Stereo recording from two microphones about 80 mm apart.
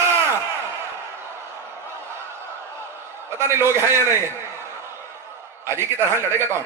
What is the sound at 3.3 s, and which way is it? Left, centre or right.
Speech, right.